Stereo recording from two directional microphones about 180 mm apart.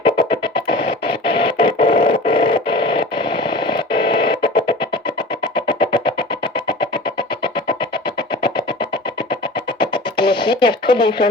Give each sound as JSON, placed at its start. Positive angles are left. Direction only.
{"t": 0.0, "sound": "music", "side_deg": 25}
{"t": 1.0, "sound": "synthesizer", "side_deg": 30}